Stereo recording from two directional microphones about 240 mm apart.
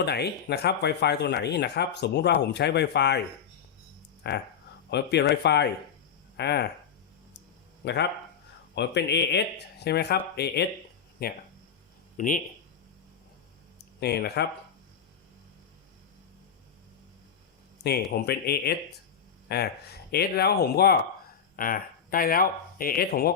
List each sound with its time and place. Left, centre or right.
0.0 s speech: left
4.2 s speech: left
7.8 s speech: left
14.0 s speech: left
18.1 s speech: left